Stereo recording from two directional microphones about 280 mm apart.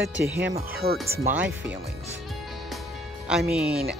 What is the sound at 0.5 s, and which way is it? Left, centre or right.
Speech, right.